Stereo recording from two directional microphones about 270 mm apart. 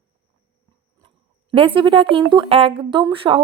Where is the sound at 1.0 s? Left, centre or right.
Centre.